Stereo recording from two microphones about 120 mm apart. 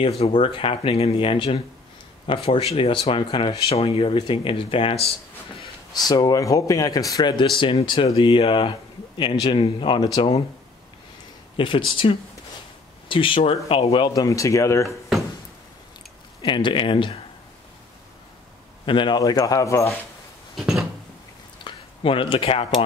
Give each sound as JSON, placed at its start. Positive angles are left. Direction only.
{"t": 0.2, "sound": "speech", "side_deg": 45}
{"t": 6.0, "sound": "speech", "side_deg": 30}
{"t": 11.5, "sound": "speech", "side_deg": 45}
{"t": 16.3, "sound": "speech", "side_deg": 40}
{"t": 18.9, "sound": "speech", "side_deg": 40}
{"t": 20.5, "sound": "a sound", "side_deg": 0}
{"t": 21.6, "sound": "speech", "side_deg": 45}